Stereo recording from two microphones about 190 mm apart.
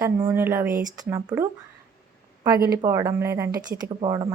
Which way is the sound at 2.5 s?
55° right (ahead or behind).